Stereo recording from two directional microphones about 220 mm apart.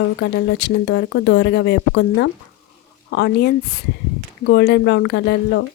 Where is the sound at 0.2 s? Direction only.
55° left (ahead or behind).